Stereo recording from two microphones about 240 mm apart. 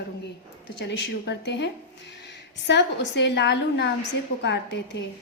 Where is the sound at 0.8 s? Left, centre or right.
Left.